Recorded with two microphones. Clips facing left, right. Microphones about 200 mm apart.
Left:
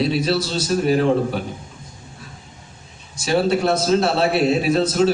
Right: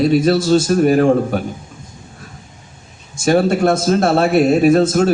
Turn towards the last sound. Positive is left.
turn(degrees=-50)  # may be behind; listen again after turning